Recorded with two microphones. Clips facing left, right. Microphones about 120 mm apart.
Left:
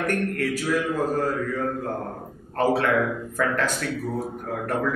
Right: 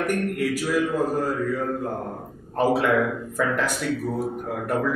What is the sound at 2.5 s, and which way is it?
A man's voice, 10° right (ahead or behind).